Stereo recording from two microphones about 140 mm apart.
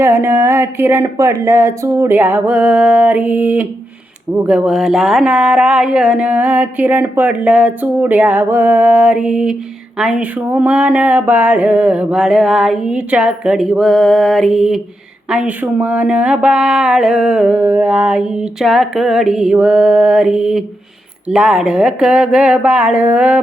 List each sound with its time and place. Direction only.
0.0 s speech: 15° right (ahead or behind)